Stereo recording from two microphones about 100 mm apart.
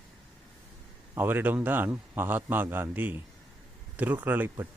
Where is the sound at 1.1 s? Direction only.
20° right (ahead or behind).